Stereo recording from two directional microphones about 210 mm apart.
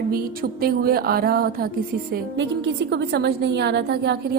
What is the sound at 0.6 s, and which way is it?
Speech, 45° right (ahead or behind).